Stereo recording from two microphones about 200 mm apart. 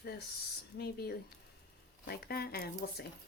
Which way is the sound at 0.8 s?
50° left (ahead or behind).